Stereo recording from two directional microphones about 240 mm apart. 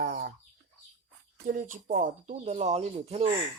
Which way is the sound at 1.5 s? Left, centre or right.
Right.